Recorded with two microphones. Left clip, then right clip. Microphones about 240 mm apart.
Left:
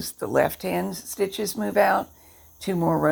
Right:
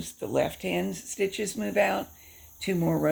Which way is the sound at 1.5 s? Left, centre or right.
Centre.